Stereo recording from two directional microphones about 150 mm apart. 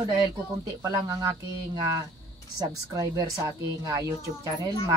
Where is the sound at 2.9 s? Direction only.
25° right (ahead or behind).